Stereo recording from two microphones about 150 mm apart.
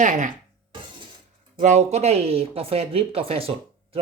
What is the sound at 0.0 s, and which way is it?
Speech, 60° right (ahead or behind).